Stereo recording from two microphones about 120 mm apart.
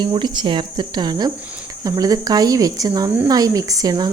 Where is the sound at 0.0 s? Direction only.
40° right (ahead or behind).